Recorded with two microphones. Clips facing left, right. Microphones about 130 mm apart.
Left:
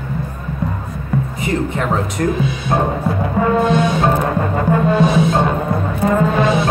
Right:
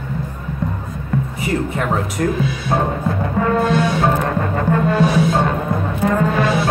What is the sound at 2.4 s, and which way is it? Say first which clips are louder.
Music: left 1 dB; 20° left (ahead or behind).